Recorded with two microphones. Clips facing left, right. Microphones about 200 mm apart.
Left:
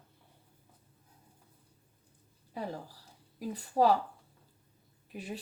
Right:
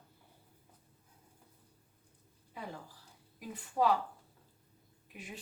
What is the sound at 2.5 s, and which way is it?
Speech, 40° left (ahead or behind).